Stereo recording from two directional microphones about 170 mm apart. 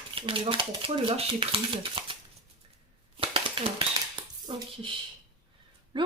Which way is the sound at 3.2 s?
30° right (ahead or behind).